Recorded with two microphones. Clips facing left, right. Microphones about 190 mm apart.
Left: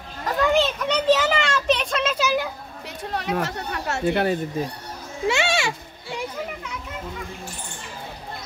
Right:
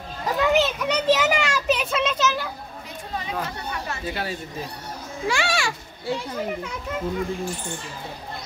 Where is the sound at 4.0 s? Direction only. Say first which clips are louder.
Left 11 dB; 55° left (ahead or behind).